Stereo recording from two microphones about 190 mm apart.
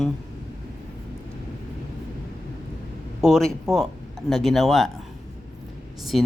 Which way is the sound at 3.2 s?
Centre (ahead or behind).